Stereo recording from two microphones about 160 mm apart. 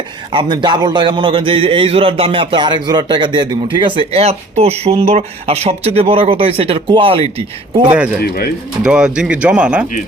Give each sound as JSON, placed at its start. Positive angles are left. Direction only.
{"t": 0.3, "sound": "a man's voice", "side_deg": -30}
{"t": 8.2, "sound": "speech", "side_deg": 75}
{"t": 8.8, "sound": "speech", "side_deg": -5}